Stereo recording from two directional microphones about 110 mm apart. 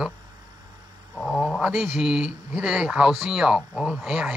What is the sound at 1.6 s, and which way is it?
Speech, centre (ahead or behind).